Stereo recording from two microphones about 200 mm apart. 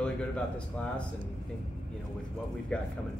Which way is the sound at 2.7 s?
5° left (ahead or behind).